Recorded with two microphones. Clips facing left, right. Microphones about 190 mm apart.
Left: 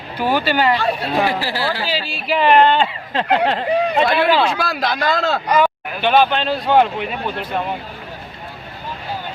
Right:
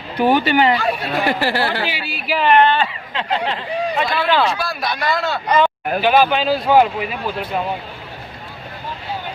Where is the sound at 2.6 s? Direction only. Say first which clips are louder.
Left 2 dB; 20° left (ahead or behind).